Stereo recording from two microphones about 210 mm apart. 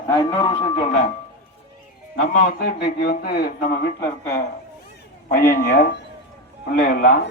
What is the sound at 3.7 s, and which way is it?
Speech, 10° left (ahead or behind).